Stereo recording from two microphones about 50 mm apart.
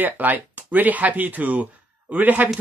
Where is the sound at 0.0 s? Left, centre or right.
Right.